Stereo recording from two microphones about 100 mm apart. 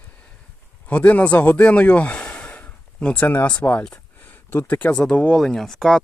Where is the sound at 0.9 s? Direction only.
15° left (ahead or behind).